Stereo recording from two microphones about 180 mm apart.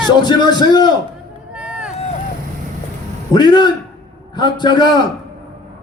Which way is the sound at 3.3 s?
25° left (ahead or behind).